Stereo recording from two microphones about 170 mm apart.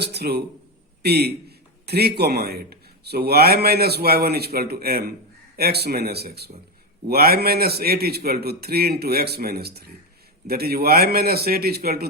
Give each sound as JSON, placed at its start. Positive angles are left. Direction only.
{"t": 0.0, "sound": "a man's voice", "side_deg": -70}